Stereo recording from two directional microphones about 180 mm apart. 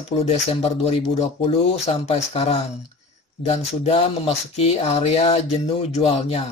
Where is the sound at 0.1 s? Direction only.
35° left (ahead or behind).